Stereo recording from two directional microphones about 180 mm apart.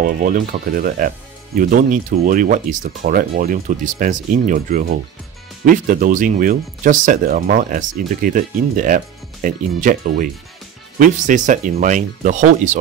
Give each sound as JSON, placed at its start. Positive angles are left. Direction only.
{"t": 0.0, "sound": "speech", "side_deg": -50}